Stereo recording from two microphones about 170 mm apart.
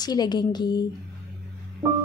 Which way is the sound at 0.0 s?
25° left (ahead or behind).